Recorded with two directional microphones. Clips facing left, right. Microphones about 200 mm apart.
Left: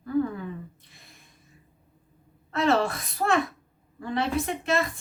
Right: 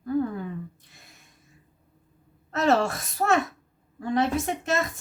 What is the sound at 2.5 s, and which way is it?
A woman's voice, 45° right (ahead or behind).